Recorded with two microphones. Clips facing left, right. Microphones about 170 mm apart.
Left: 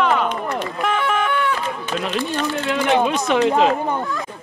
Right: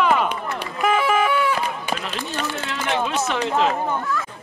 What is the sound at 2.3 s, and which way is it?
Speech, 15° left (ahead or behind).